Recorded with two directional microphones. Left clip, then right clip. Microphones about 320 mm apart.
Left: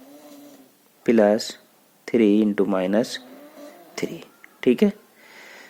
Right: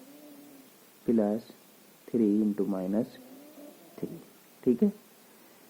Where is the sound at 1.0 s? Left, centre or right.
Left.